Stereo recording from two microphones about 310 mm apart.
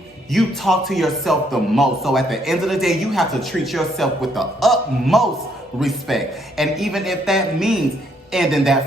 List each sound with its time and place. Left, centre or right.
0.3 s a man's voice: centre